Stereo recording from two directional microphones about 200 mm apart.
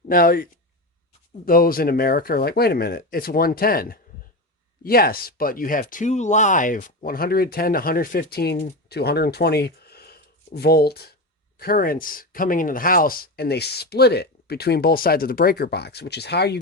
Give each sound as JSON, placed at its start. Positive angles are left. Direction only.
{"t": 0.1, "sound": "speech", "side_deg": 45}
{"t": 1.5, "sound": "speech", "side_deg": 45}